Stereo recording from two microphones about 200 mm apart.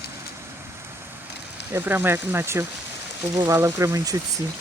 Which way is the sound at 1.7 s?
10° right (ahead or behind).